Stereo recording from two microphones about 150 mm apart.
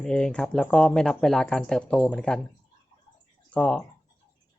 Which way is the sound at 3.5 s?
5° left (ahead or behind).